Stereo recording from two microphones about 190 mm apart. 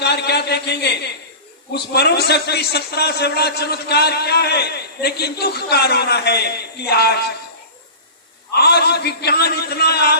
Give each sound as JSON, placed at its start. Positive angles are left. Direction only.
{"t": 0.0, "sound": "a man's voice", "side_deg": 60}
{"t": 8.5, "sound": "a man's voice", "side_deg": 60}